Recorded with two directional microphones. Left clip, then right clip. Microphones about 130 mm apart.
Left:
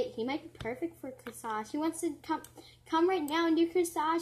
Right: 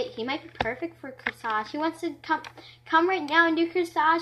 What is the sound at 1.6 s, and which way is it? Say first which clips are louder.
Speech: right 5 dB; 25° left (ahead or behind).